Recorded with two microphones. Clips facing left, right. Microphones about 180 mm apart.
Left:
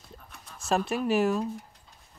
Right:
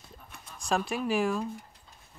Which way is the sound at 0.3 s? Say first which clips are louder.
Left 2 dB; centre (ahead or behind).